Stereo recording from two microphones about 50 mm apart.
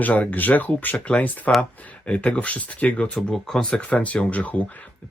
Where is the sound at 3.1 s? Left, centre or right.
Centre.